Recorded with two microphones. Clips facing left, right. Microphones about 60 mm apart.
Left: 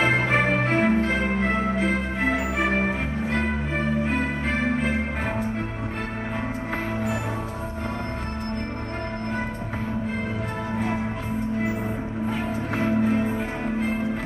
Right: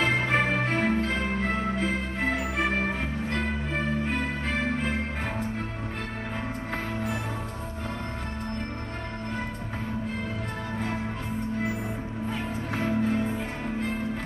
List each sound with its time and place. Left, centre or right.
0.0 s music: centre
12.3 s music: centre